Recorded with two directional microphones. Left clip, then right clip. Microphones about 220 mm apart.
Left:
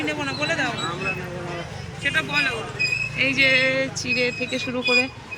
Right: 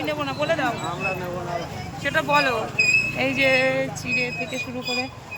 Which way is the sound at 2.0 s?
20° right (ahead or behind).